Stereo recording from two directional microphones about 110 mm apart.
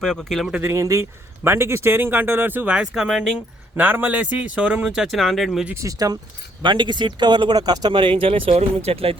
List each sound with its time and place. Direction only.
0.0 s speech: 5° left (ahead or behind)
0.6 s speech: 30° right (ahead or behind); by 3.3 s 5° right (ahead or behind)
3.8 s speech: 15° right (ahead or behind); by 5.6 s centre (ahead or behind)
5.7 s speech: 30° right (ahead or behind)
6.6 s speech: 45° right (ahead or behind); by 9.1 s 60° right (ahead or behind)